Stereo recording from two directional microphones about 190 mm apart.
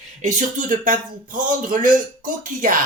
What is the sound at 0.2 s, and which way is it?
Speech, 40° right (ahead or behind).